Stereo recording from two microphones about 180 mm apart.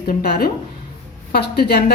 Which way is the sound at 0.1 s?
60° left (ahead or behind).